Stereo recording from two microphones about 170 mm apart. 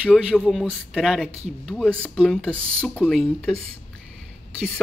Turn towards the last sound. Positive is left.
turn(degrees=0)  # may be behind; listen again after turning